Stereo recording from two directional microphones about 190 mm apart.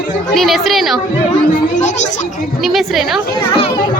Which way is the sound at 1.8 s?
40° left (ahead or behind).